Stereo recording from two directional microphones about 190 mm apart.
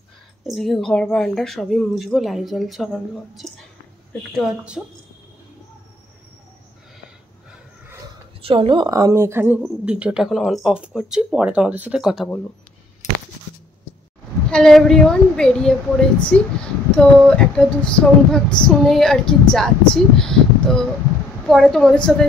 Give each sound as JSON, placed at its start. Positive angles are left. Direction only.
{"t": 0.5, "sound": "a woman's voice", "side_deg": 0}
{"t": 8.4, "sound": "a woman's voice", "side_deg": -30}
{"t": 13.0, "sound": "a sound", "side_deg": 40}
{"t": 14.5, "sound": "a woman's voice", "side_deg": 5}